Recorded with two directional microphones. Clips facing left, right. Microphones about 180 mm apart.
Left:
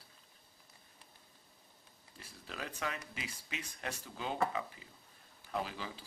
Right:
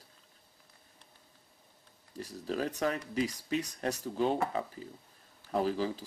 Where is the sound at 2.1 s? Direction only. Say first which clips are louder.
Right 14 dB; 40° right (ahead or behind).